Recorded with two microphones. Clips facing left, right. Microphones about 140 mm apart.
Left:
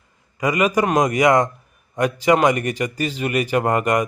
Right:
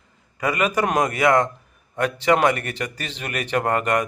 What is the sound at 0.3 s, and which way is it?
Speech, 10° left (ahead or behind).